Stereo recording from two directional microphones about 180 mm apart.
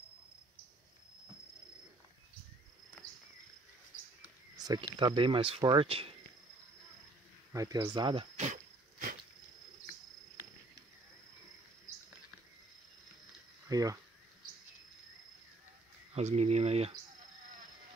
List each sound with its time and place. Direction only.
4.6 s speech: 20° right (ahead or behind)
7.5 s speech: 20° right (ahead or behind)
13.7 s speech: 20° right (ahead or behind)
16.2 s speech: 40° right (ahead or behind)